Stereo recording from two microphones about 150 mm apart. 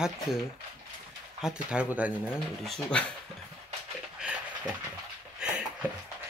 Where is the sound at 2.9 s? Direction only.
5° left (ahead or behind).